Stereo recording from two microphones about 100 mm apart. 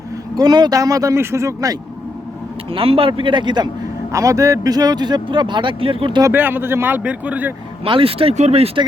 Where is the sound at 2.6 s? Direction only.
65° right (ahead or behind); by 3.7 s 50° right (ahead or behind).